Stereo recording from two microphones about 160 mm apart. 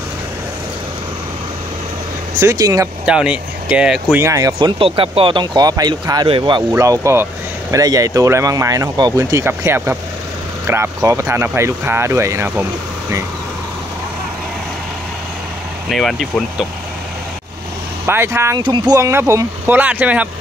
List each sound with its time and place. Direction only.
2.4 s speech: 20° right (ahead or behind)
3.1 s speech: 5° right (ahead or behind)
4.2 s speech: 20° right (ahead or behind)
4.6 s speech: 30° right (ahead or behind)
6.7 s speech: 20° right (ahead or behind)
15.9 s speech: centre (ahead or behind)
18.0 s speech: 15° right (ahead or behind)